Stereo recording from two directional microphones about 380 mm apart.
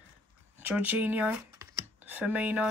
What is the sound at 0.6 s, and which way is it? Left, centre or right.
Speech, centre.